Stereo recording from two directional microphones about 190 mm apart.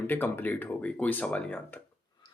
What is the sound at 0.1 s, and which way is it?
Speech, 10° left (ahead or behind).